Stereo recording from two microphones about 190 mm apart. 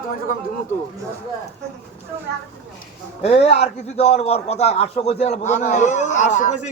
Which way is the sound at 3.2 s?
35° left (ahead or behind).